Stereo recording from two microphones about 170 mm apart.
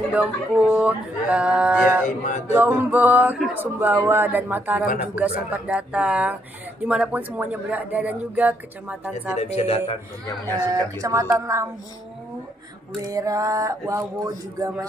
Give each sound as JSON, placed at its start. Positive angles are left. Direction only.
{"t": 0.1, "sound": "speech", "side_deg": -5}
{"t": 2.0, "sound": "speech", "side_deg": 45}
{"t": 2.5, "sound": "speech", "side_deg": -15}
{"t": 9.4, "sound": "a man's voice", "side_deg": 35}
{"t": 10.2, "sound": "speech", "side_deg": 15}
{"t": 10.7, "sound": "speech", "side_deg": -20}
{"t": 13.1, "sound": "speech", "side_deg": -20}